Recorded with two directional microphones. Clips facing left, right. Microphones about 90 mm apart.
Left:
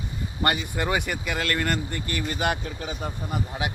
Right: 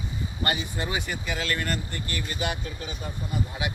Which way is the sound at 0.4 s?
55° left (ahead or behind).